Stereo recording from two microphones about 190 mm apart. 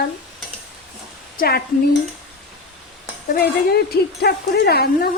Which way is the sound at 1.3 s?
50° left (ahead or behind).